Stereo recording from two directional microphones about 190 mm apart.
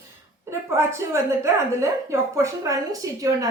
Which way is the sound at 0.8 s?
15° right (ahead or behind).